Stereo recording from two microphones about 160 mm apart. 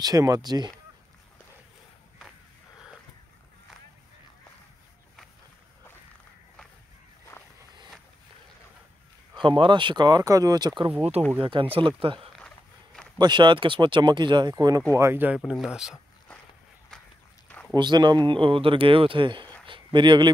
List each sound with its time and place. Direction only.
0.0 s speech: 20° right (ahead or behind)
9.3 s speech: 30° right (ahead or behind)
11.0 s speech: 40° right (ahead or behind)
12.4 s a sound: 5° left (ahead or behind)
13.2 s speech: 30° right (ahead or behind); by 16.0 s 5° right (ahead or behind)
17.7 s speech: 30° right (ahead or behind)
19.6 s a sound: 30° right (ahead or behind)